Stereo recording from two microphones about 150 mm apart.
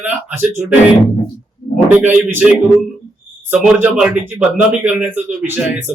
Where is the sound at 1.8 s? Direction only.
10° right (ahead or behind).